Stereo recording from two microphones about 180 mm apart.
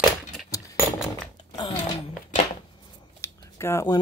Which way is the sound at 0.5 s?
15° left (ahead or behind).